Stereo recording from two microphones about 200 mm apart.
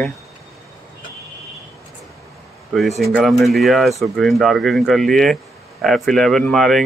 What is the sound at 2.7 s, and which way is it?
Speech, centre (ahead or behind).